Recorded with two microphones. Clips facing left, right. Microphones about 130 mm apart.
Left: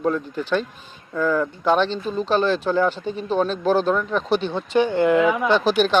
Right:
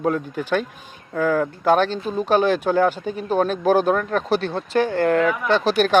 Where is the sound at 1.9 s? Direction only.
10° right (ahead or behind); by 5.2 s 5° left (ahead or behind).